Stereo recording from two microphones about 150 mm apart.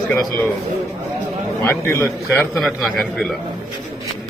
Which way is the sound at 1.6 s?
15° left (ahead or behind).